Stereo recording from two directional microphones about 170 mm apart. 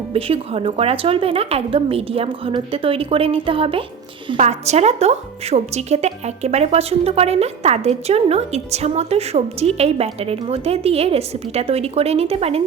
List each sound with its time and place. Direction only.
0.1 s a woman's voice: 35° right (ahead or behind)